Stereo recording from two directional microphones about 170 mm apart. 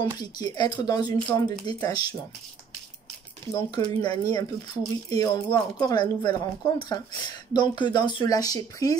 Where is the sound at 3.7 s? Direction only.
25° left (ahead or behind).